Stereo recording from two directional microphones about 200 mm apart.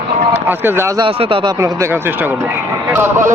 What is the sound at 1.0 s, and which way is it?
Speech, 25° right (ahead or behind).